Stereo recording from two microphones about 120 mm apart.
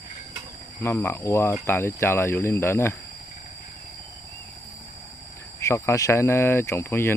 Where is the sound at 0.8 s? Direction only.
20° left (ahead or behind).